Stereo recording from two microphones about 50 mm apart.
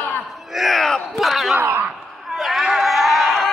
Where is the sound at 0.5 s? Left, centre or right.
Centre.